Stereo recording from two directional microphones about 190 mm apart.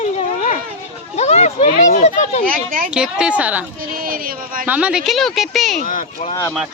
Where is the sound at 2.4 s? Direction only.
45° right (ahead or behind).